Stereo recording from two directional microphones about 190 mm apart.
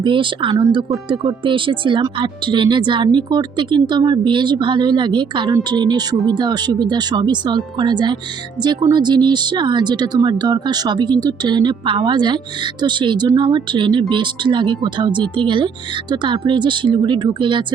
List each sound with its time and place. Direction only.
0.0 s speech: 25° right (ahead or behind)